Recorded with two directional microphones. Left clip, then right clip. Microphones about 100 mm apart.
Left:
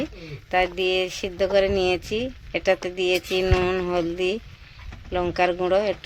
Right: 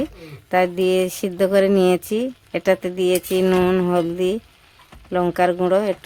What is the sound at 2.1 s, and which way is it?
Speech, 90° right.